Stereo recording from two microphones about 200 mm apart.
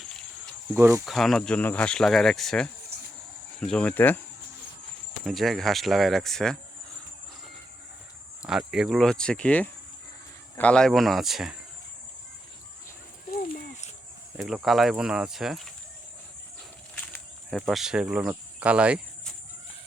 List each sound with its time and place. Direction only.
0.0 s cricket: centre (ahead or behind)
0.7 s speech: 15° right (ahead or behind)
1.0 s speech: centre (ahead or behind)
5.2 s speech: centre (ahead or behind)
8.4 s speech: 5° right (ahead or behind)
13.3 s a sound: 45° left (ahead or behind)
14.3 s speech: centre (ahead or behind)
16.9 s cricket: 5° left (ahead or behind)